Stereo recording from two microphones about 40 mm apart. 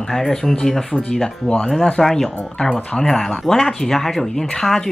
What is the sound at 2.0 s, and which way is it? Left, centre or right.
Speech, centre.